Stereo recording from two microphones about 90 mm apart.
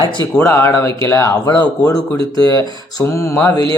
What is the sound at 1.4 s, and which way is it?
Speech, 50° left (ahead or behind).